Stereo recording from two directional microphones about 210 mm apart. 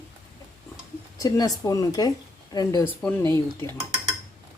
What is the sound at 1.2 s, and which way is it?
Speech, 15° left (ahead or behind).